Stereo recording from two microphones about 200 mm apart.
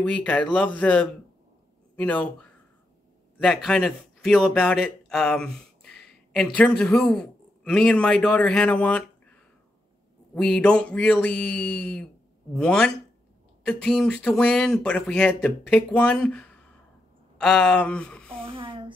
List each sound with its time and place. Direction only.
0.0 s speech: 5° left (ahead or behind)
3.3 s speech: centre (ahead or behind)
10.3 s speech: 5° left (ahead or behind)
18.4 s a sound: 25° right (ahead or behind)